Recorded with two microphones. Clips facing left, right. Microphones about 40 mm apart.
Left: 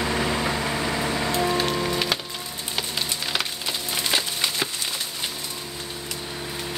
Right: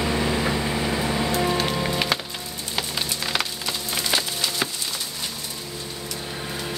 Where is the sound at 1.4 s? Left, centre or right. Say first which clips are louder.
Even; centre.